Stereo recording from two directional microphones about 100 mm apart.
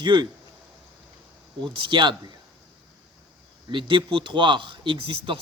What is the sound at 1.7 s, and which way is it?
Speech, 55° right (ahead or behind).